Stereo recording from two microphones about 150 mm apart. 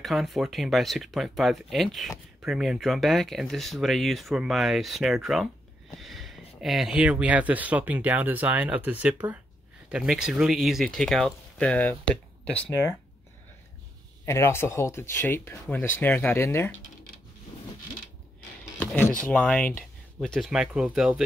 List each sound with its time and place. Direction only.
0.0 s speech: centre (ahead or behind)
14.2 s speech: 20° left (ahead or behind)
18.8 s speech: 15° left (ahead or behind)
20.2 s speech: centre (ahead or behind)